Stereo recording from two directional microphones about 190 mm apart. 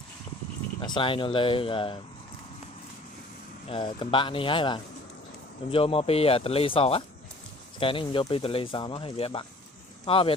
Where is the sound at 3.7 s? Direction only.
25° left (ahead or behind).